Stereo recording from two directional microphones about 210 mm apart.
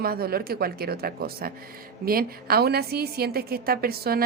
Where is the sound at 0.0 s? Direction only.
45° right (ahead or behind).